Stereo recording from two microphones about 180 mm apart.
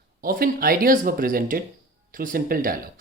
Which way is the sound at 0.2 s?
55° right (ahead or behind).